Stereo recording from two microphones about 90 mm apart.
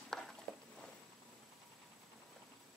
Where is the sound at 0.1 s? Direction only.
5° left (ahead or behind).